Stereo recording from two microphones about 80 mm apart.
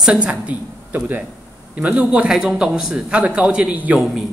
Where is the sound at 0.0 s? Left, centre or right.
Centre.